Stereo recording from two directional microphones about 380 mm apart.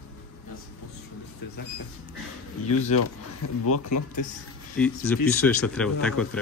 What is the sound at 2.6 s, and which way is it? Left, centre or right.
Speech, left.